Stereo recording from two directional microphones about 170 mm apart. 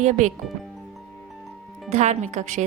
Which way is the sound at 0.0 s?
45° right (ahead or behind).